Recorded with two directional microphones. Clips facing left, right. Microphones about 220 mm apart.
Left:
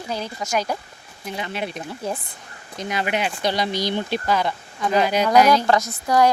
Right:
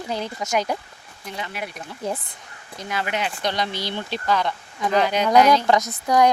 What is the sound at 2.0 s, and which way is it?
Speech, 15° right (ahead or behind).